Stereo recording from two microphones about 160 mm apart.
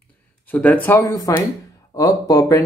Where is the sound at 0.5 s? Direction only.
10° left (ahead or behind).